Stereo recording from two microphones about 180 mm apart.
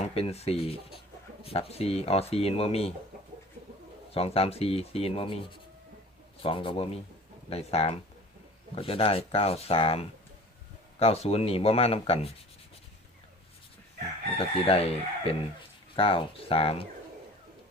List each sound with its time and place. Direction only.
0.0 s speech: 35° left (ahead or behind)
4.1 s speech: 35° left (ahead or behind)
14.7 s speech: 30° left (ahead or behind)